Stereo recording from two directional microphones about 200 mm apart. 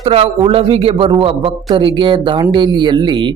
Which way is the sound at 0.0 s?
25° right (ahead or behind).